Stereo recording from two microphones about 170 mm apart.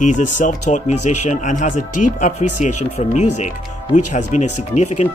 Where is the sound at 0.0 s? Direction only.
50° left (ahead or behind).